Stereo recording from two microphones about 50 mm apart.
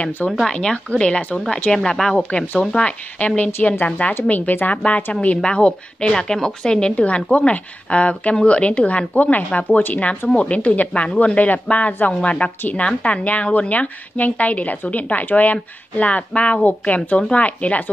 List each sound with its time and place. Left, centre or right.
0.5 s speech: centre
2.1 s speech: left
4.1 s a woman's voice: left